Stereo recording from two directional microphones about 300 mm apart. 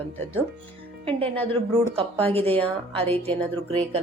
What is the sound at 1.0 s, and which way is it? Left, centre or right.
A woman's voice, centre.